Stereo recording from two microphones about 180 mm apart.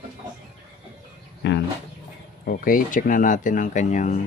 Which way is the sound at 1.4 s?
75° left (ahead or behind).